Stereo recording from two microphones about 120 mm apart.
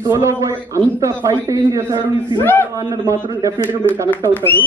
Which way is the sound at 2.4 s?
15° left (ahead or behind).